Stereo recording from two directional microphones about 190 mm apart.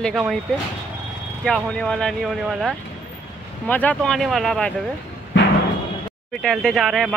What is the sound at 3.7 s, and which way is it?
Speech, 10° left (ahead or behind).